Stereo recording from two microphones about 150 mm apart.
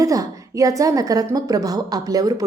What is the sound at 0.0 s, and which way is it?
A woman's voice, 20° right (ahead or behind).